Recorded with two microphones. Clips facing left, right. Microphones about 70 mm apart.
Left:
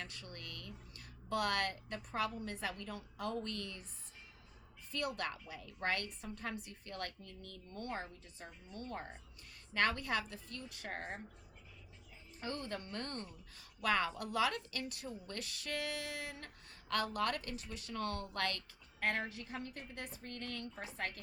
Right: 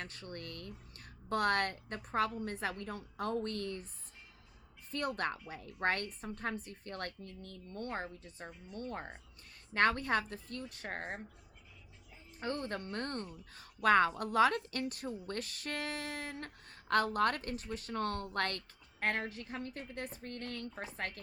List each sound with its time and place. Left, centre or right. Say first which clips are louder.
0.0 s a woman's voice: right 4 dB; right
4.9 s a woman's voice: right 4 dB; right
12.4 s a woman's voice: right 4 dB; right